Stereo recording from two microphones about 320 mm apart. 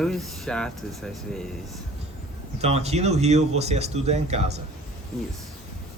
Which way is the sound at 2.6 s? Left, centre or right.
Centre.